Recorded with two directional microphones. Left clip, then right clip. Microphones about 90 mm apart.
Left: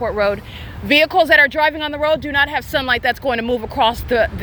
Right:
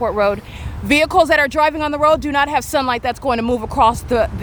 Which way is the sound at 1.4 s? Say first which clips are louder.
Right 1 dB; 75° right (ahead or behind).